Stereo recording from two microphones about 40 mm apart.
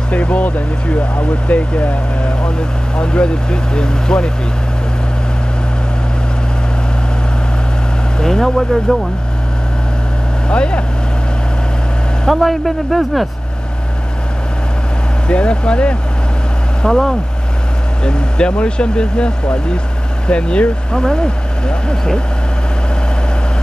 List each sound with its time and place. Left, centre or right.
0.1 s speech: left
8.2 s speech: centre
10.5 s speech: left
12.3 s a man's voice: centre
15.2 s speech: left
16.8 s speech: centre
18.0 s speech: left